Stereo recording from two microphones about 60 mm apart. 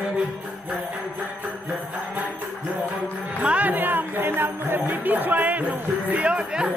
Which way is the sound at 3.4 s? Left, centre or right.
Right.